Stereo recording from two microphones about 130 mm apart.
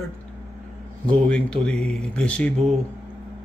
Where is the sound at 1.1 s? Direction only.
10° left (ahead or behind).